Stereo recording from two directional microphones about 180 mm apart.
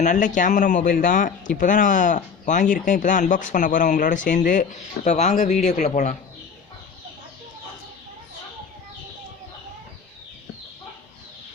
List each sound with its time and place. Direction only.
0.0 s speech: 45° left (ahead or behind)